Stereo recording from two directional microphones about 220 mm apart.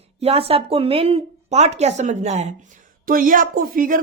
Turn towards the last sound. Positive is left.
turn(degrees=-40)  # may be behind; listen again after turning